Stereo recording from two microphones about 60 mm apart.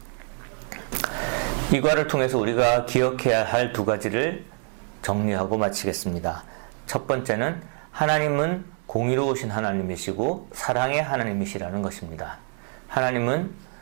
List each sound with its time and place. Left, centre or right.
0.9 s a sound: centre
1.1 s a man's voice: centre
5.7 s speech: centre
6.1 s speech: centre
9.9 s speech: centre
10.7 s speech: centre